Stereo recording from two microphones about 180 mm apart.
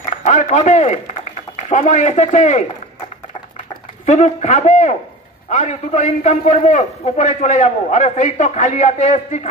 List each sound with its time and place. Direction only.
0.0 s a man's voice: 40° left (ahead or behind)
4.0 s a man's voice: 40° left (ahead or behind)